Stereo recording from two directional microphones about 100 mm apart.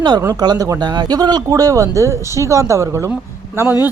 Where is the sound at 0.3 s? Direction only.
40° right (ahead or behind).